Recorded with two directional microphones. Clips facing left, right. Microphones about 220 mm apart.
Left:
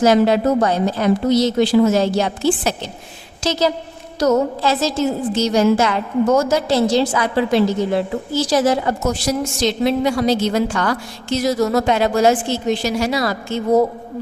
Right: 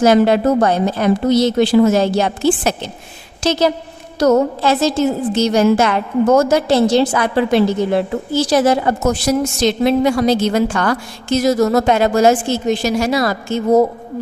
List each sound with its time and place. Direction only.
0.0 s a woman's voice: 55° right (ahead or behind)